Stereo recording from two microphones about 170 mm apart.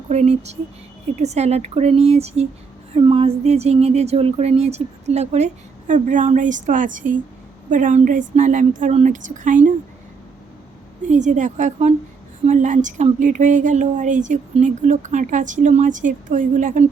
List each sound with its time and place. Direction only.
0.1 s speech: 40° right (ahead or behind)
11.1 s speech: 45° right (ahead or behind)